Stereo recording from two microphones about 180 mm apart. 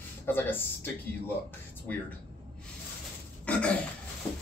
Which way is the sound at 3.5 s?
5° left (ahead or behind).